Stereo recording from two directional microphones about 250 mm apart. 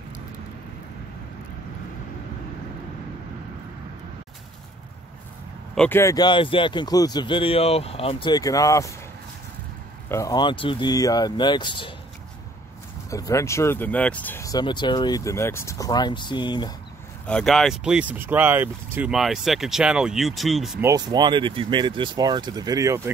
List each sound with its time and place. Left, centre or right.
5.8 s speech: centre
10.0 s speech: centre
13.1 s speech: centre
17.3 s speech: centre
20.9 s speech: centre